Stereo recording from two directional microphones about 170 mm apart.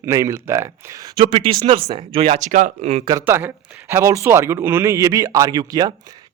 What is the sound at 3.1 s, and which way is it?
Speech, 15° right (ahead or behind).